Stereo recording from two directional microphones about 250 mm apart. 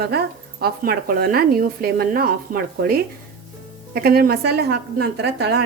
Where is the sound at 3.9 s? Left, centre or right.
Right.